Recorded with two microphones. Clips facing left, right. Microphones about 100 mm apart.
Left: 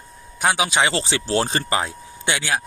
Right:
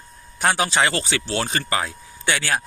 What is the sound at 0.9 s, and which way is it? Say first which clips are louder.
Speech: left 3 dB; 25° left (ahead or behind).